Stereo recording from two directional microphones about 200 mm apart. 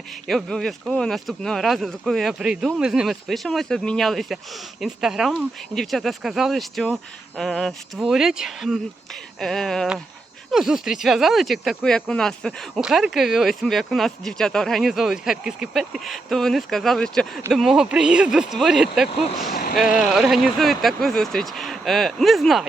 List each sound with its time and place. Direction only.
0.3 s speech: centre (ahead or behind)
19.5 s speech: 45° left (ahead or behind)
19.7 s speech: 5° right (ahead or behind)